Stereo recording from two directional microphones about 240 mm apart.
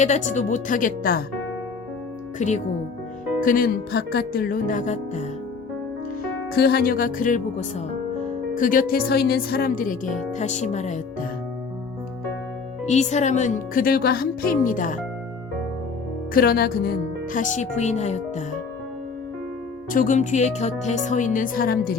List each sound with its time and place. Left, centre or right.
0.0 s speech: left
2.4 s speech: left
6.5 s speech: left
12.8 s speech: left
16.3 s speech: left
19.9 s speech: left